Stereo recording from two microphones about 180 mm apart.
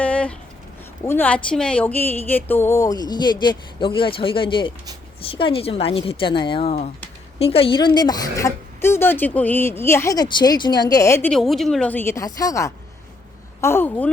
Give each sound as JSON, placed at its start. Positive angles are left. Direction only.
{"t": 0.0, "sound": "a sound", "side_deg": 5}
{"t": 1.0, "sound": "speech", "side_deg": 10}
{"t": 11.3, "sound": "speech", "side_deg": 0}